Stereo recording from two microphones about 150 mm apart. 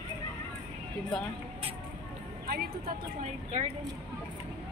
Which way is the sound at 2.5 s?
80° right.